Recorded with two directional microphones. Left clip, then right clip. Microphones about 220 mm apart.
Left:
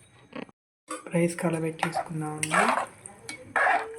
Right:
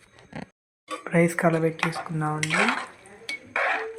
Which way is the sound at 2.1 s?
10° right (ahead or behind).